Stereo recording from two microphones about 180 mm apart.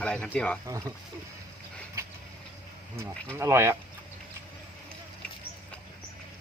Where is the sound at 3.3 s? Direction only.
15° right (ahead or behind).